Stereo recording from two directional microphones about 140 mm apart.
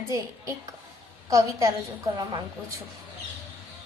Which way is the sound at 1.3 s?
25° right (ahead or behind).